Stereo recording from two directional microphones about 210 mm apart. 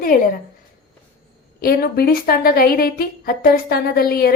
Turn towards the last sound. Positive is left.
turn(degrees=45)  # may be behind; listen again after turning